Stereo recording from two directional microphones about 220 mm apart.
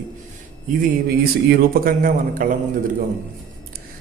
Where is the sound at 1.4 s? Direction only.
40° right (ahead or behind).